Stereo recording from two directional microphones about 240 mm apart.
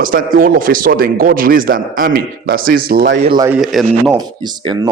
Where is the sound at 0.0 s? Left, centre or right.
Right.